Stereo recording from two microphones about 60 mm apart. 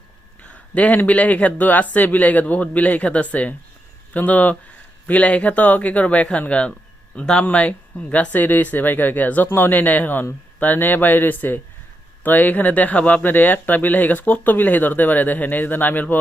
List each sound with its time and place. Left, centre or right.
0.4 s speech: left